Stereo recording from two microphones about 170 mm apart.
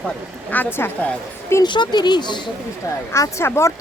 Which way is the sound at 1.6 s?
25° left (ahead or behind).